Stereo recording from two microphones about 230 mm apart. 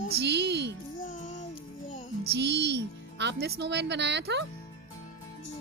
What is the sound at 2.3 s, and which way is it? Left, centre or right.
A woman's voice, right.